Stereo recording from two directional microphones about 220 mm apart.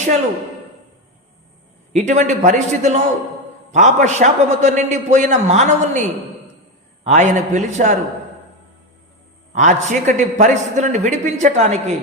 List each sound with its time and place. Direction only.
1.9 s a man's voice: 30° right (ahead or behind)
7.0 s a man's voice: 30° right (ahead or behind)
9.5 s a man's voice: 35° right (ahead or behind)